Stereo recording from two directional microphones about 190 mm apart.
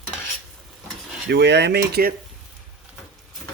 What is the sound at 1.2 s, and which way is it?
Speech, 65° right (ahead or behind).